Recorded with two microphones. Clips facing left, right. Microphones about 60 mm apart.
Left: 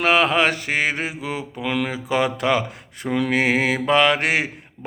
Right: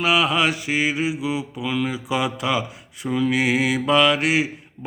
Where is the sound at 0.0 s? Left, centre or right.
Left.